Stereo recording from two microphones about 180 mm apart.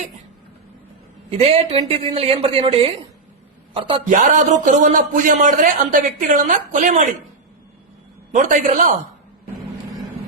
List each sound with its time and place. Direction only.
1.4 s a man's voice: 35° right (ahead or behind)
4.1 s a man's voice: 45° right (ahead or behind)
8.3 s a man's voice: 45° right (ahead or behind)